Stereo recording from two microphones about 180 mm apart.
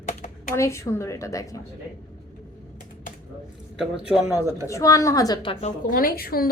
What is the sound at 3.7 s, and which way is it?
Speech, 5° right (ahead or behind).